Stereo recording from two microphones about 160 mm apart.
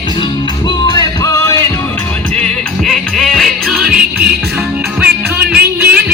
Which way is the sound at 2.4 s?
Centre (ahead or behind).